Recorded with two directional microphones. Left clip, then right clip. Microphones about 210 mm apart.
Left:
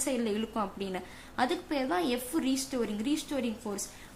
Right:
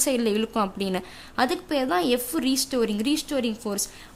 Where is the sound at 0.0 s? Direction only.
35° right (ahead or behind).